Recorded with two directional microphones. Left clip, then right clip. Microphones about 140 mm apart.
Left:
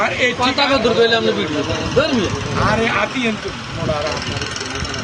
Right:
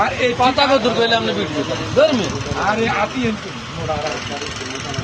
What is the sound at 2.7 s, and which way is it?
Speech, centre (ahead or behind).